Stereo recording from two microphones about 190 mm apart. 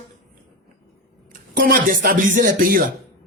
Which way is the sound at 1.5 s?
50° right (ahead or behind).